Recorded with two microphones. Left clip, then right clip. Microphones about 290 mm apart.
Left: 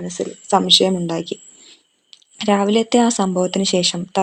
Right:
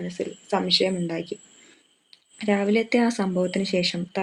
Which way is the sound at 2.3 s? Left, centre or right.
Left.